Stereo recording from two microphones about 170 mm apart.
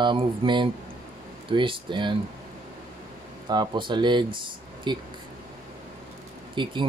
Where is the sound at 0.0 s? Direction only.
30° right (ahead or behind).